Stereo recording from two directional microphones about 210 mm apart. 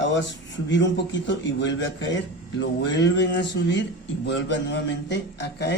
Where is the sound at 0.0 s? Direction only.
60° left (ahead or behind).